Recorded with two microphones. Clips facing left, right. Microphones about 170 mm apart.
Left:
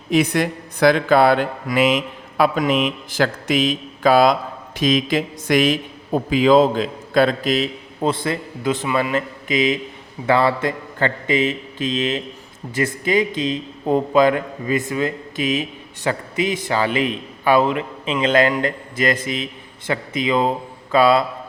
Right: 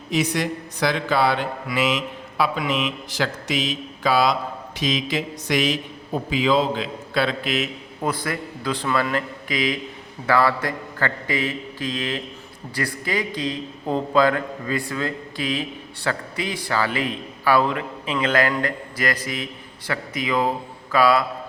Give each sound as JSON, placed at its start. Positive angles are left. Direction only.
{"t": 0.1, "sound": "speech", "side_deg": 55}
{"t": 8.0, "sound": "a man's voice", "side_deg": 25}